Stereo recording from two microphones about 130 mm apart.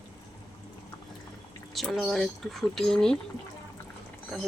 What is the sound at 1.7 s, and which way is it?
Speech, centre (ahead or behind).